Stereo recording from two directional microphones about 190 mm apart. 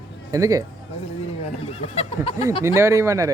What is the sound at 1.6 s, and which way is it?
Speech, 30° left (ahead or behind).